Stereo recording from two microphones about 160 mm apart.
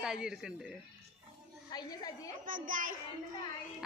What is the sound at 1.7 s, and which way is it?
Speech, 25° left (ahead or behind).